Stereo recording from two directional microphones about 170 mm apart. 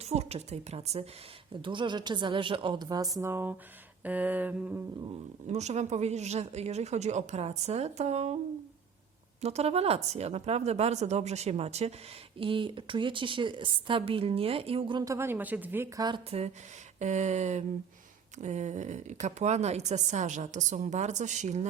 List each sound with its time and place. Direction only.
0.0 s a woman's voice: 40° right (ahead or behind)
1.6 s a woman's voice: 30° right (ahead or behind)
3.2 s a sound: 15° right (ahead or behind)
5.5 s a woman's voice: 40° right (ahead or behind)
9.4 s a woman's voice: 40° right (ahead or behind); by 16.0 s 15° right (ahead or behind)
16.0 s a woman's voice: 30° right (ahead or behind)
17.0 s a woman's voice: 45° right (ahead or behind)